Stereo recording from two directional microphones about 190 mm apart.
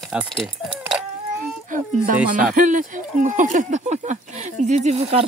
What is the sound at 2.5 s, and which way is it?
Speech, 40° right (ahead or behind).